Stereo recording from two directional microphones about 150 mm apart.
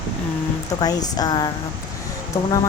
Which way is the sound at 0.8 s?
25° left (ahead or behind).